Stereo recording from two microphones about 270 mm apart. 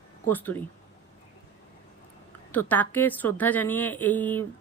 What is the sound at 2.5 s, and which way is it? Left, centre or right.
A woman's voice, centre.